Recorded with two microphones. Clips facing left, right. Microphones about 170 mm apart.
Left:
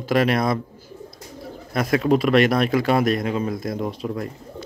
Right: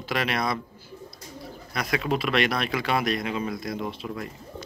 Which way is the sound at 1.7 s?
45° left (ahead or behind).